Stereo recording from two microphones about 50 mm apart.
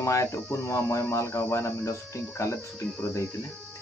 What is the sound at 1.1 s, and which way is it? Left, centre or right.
Speech, left.